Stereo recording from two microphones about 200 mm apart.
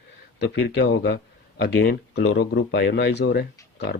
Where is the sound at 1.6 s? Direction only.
55° left (ahead or behind).